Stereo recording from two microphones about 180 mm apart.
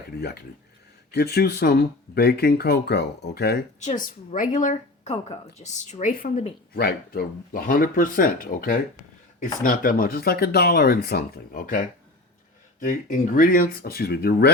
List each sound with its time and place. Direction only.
0.2 s speech: 60° left (ahead or behind)
3.8 s speech: 45° left (ahead or behind)
6.7 s speech: 60° left (ahead or behind)